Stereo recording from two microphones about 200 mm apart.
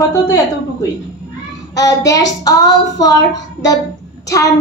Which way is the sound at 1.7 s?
20° left (ahead or behind).